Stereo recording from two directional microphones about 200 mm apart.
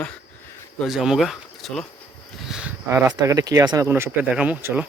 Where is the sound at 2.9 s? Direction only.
15° right (ahead or behind).